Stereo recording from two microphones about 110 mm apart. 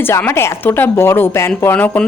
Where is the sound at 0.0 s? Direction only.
20° left (ahead or behind).